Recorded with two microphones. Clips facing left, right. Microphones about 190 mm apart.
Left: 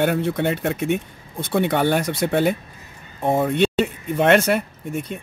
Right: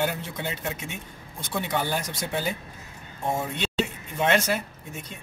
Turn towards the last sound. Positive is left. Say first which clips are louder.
# left 12 dB
turn(degrees=60)  # may be behind; listen again after turning